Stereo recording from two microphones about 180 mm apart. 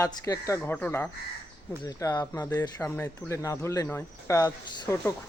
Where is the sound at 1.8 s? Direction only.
20° left (ahead or behind).